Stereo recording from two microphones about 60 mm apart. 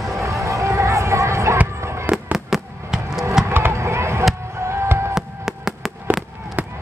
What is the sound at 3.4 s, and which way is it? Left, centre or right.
Fireworks, right.